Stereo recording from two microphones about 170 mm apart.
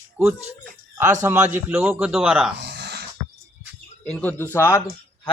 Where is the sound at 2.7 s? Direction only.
75° right (ahead or behind).